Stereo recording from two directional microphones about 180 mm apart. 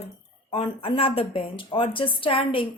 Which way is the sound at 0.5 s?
30° left (ahead or behind).